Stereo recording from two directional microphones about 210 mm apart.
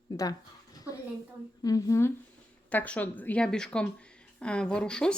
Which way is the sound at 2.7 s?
5° left (ahead or behind).